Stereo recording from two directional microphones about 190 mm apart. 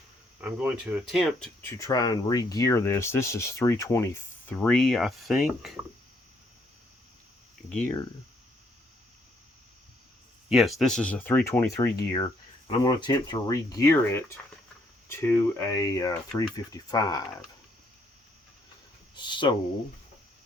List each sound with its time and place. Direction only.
0.4 s speech: 5° right (ahead or behind)
1.6 s speech: 20° left (ahead or behind); by 5.8 s centre (ahead or behind)
7.7 s speech: 5° left (ahead or behind)
10.5 s speech: centre (ahead or behind); by 17.2 s 20° left (ahead or behind)
19.1 s speech: 25° left (ahead or behind)